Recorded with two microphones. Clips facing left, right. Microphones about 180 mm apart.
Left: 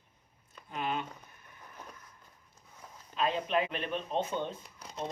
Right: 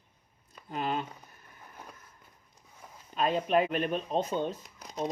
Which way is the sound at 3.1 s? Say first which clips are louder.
Right 4 dB; 45° right (ahead or behind).